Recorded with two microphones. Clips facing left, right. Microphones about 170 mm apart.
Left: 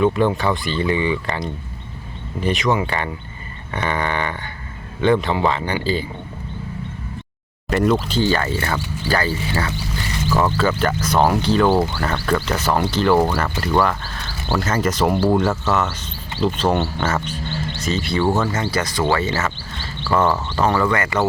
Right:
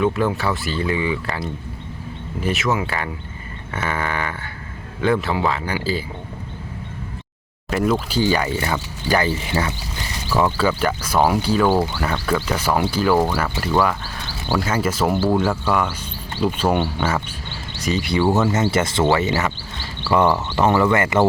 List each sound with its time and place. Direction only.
0.0 s speech: centre (ahead or behind)
7.7 s speech: 5° right (ahead or behind); by 21.2 s 25° right (ahead or behind)